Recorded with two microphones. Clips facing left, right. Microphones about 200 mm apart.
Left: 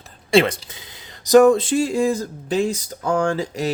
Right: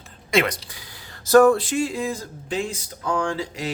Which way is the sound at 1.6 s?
40° left (ahead or behind).